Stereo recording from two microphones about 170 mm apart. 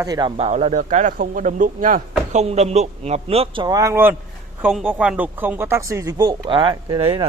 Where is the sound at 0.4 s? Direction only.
40° right (ahead or behind).